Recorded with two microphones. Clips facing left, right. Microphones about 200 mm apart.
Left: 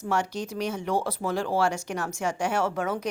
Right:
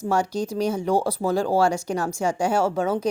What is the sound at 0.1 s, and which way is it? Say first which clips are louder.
Speech: right 4 dB; 35° right (ahead or behind).